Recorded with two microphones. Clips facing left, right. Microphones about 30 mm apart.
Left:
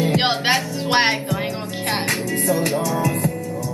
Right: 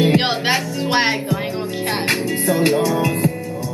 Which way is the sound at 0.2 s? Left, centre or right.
Centre.